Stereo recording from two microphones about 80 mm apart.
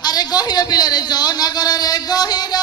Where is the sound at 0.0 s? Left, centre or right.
Left.